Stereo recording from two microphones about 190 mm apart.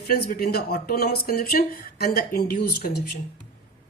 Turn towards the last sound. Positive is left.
turn(degrees=55)  # may be behind; listen again after turning